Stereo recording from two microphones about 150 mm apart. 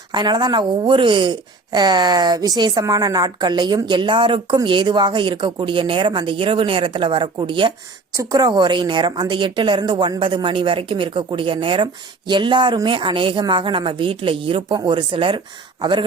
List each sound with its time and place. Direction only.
0.1 s a woman's voice: 30° right (ahead or behind)
8.1 s a woman's voice: 25° right (ahead or behind)